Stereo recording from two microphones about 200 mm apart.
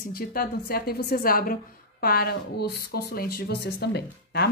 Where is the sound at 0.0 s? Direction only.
50° left (ahead or behind).